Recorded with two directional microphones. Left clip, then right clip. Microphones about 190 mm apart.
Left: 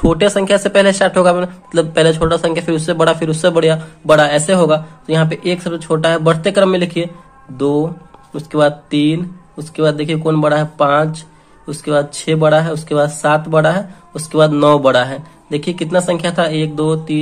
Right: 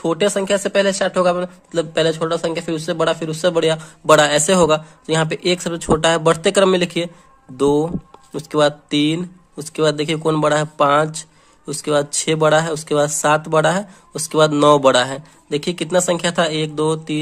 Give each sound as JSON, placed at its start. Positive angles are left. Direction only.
{"t": 0.0, "sound": "speech", "side_deg": -25}